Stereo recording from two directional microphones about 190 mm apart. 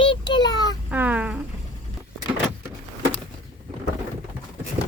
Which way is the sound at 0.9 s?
10° right (ahead or behind).